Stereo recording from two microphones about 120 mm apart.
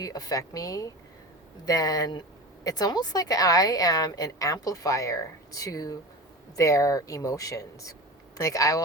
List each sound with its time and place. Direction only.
0.0 s a woman's voice: 30° left (ahead or behind)